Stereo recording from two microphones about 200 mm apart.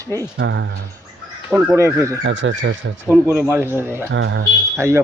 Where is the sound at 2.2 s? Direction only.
70° right (ahead or behind).